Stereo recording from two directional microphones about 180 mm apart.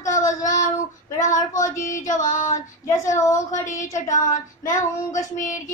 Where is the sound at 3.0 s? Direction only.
15° left (ahead or behind).